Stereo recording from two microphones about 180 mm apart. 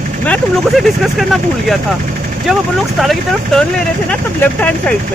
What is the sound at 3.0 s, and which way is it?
Speech, centre (ahead or behind).